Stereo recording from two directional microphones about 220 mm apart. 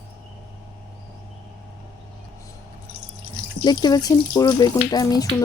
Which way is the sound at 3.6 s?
20° left (ahead or behind).